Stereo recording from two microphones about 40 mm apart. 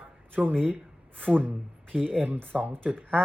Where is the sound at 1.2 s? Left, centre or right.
Right.